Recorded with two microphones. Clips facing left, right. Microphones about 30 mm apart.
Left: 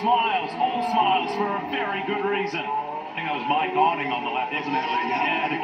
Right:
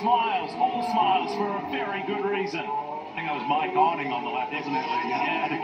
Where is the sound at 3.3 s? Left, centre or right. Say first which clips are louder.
Left 2 dB; left.